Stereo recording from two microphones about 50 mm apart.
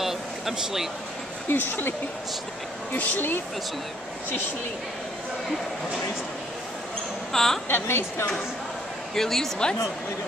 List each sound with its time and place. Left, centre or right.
0.0 s a sound: centre
1.5 s a woman's voice: left
2.9 s speech: left
7.3 s a woman's voice: centre
7.6 s a woman's voice: left
9.1 s a woman's voice: centre